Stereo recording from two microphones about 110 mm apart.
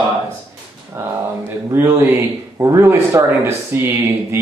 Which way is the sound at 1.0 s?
20° right (ahead or behind).